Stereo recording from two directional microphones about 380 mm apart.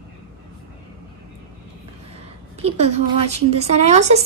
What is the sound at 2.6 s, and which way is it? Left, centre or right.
A woman's voice, centre.